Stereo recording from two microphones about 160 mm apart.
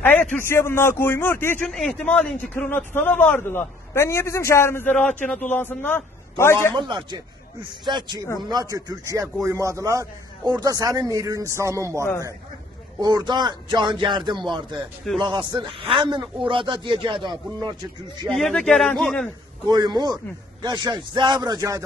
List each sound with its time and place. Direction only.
0.0 s a man's voice: 10° left (ahead or behind)
1.7 s a man's voice: 5° left (ahead or behind)
6.7 s a man's voice: 30° right (ahead or behind)
12.0 s a man's voice: 15° left (ahead or behind)
13.0 s a man's voice: 25° right (ahead or behind)
18.3 s a man's voice: 5° left (ahead or behind)
19.7 s a man's voice: 25° right (ahead or behind)